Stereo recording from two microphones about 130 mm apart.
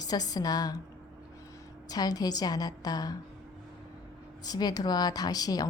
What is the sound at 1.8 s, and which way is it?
A woman's voice, 30° left (ahead or behind).